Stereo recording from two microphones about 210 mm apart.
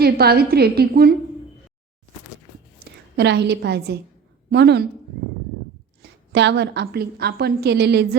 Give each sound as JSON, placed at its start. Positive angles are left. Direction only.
{"t": 0.0, "sound": "a woman's voice", "side_deg": -50}
{"t": 3.2, "sound": "a woman's voice", "side_deg": -55}
{"t": 6.0, "sound": "a woman's voice", "side_deg": -55}